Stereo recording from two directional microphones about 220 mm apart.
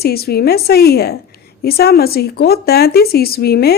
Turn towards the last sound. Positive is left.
turn(degrees=45)  # may be behind; listen again after turning